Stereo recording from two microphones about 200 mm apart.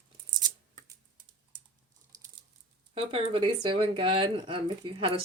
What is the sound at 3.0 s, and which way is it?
Speech, 25° right (ahead or behind).